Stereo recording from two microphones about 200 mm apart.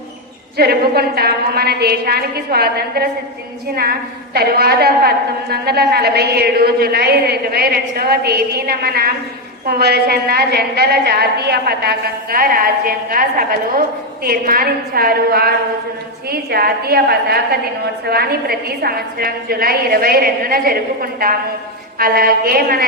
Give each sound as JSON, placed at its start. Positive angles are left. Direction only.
{"t": 0.5, "sound": "a woman's voice", "side_deg": -50}
{"t": 4.4, "sound": "a woman's voice", "side_deg": -50}
{"t": 14.3, "sound": "a woman's voice", "side_deg": -45}